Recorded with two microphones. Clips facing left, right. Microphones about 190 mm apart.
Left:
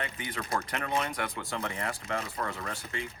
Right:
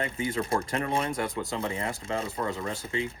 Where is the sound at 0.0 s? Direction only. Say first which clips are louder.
Right 7 dB; 30° right (ahead or behind).